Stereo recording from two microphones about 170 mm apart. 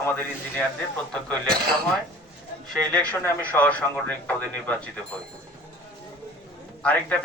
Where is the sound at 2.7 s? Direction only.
5° left (ahead or behind).